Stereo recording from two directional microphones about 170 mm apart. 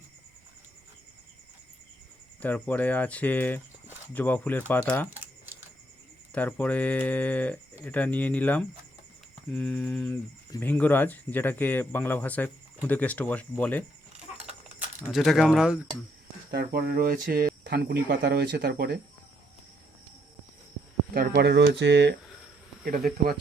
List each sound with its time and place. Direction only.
2.4 s speech: 10° left (ahead or behind)
6.3 s speech: 10° left (ahead or behind)
15.0 s speech: centre (ahead or behind)
16.5 s speech: 65° right (ahead or behind)
21.1 s speech: 60° right (ahead or behind); by 22.1 s 85° right
22.8 s speech: 55° right (ahead or behind)